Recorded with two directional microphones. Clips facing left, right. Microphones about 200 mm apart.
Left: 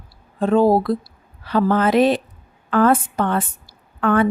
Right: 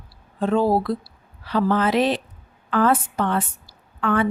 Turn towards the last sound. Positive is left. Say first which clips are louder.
# left 4 dB
turn(degrees=50)  # may be behind; listen again after turning